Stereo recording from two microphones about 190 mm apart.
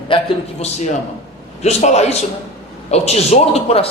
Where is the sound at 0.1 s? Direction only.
30° left (ahead or behind).